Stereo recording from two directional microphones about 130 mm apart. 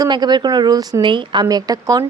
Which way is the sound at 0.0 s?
35° right (ahead or behind).